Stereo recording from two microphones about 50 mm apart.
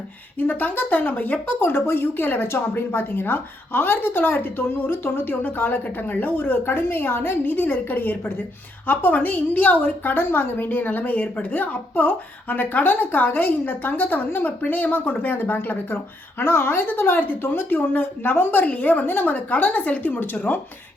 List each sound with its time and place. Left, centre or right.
0.3 s a woman's voice: left
18.6 s a woman's voice: left